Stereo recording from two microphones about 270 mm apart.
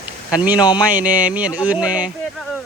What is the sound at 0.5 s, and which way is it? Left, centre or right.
Speech, centre.